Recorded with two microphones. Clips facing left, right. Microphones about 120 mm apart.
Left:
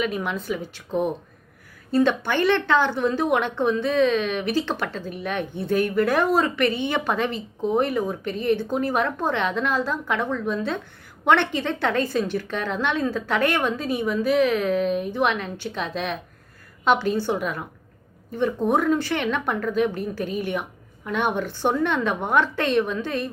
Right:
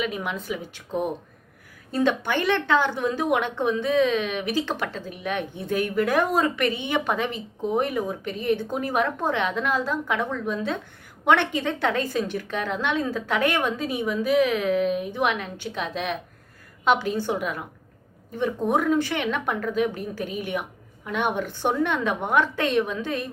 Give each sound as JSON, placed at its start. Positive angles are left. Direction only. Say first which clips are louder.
{"t": 0.0, "sound": "a woman's voice", "louder": "left 3 dB", "side_deg": -15}